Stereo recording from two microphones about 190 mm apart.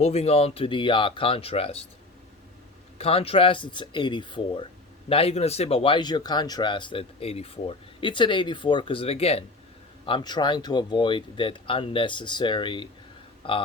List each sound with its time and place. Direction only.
0.0 s speech: 30° left (ahead or behind)
3.0 s speech: 30° left (ahead or behind)